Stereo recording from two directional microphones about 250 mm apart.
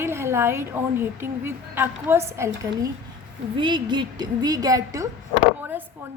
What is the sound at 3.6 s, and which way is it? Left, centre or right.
A woman's voice, centre.